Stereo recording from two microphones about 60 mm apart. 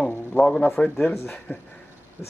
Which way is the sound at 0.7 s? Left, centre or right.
Centre.